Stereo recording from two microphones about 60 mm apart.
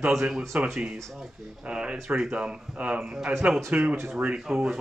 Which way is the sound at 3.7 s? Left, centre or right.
Right.